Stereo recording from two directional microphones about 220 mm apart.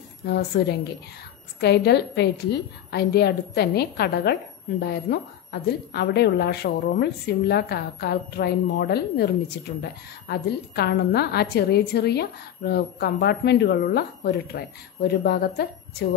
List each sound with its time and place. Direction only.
0.5 s a woman's voice: 50° left (ahead or behind)